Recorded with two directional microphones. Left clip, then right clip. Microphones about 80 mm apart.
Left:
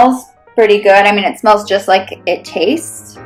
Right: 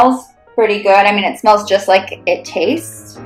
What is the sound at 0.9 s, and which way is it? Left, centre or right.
Speech, left.